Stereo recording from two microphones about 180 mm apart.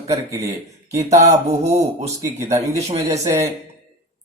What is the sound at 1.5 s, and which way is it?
Speech, 35° right (ahead or behind).